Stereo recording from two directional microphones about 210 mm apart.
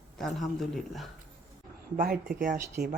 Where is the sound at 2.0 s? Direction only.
40° right (ahead or behind).